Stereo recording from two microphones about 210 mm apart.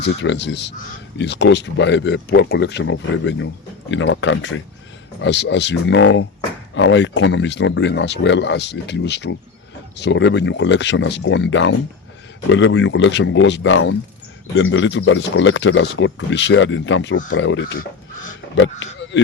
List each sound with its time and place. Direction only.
0.0 s speech: 55° left (ahead or behind)